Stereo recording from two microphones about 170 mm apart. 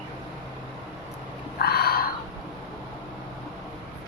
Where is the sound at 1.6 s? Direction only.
65° left (ahead or behind).